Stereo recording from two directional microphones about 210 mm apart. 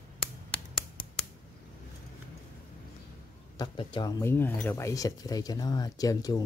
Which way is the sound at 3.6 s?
20° left (ahead or behind).